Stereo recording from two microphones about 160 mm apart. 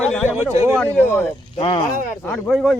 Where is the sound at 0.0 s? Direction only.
5° left (ahead or behind).